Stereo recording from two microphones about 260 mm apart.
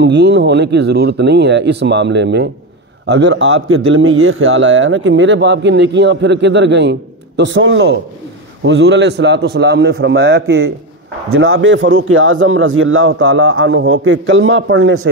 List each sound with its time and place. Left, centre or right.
0.0 s a man's voice: right